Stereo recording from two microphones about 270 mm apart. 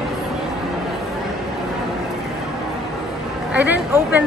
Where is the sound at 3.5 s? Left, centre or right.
Centre.